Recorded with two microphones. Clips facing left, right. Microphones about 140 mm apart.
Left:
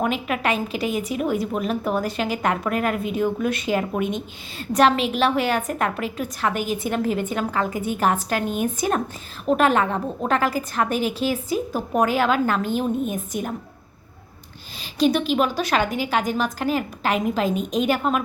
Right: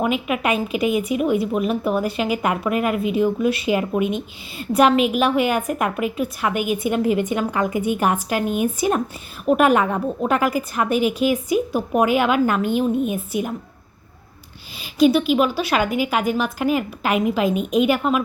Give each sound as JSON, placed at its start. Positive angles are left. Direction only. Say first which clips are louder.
{"t": 0.0, "sound": "a woman's voice", "louder": "right 2 dB", "side_deg": -5}
{"t": 0.7, "sound": "a woman's voice", "louder": "right 5 dB", "side_deg": 35}
{"t": 1.1, "sound": "a woman's voice", "louder": "right 4 dB", "side_deg": -5}
{"t": 14.9, "sound": "a woman's voice", "louder": "right 4 dB", "side_deg": -10}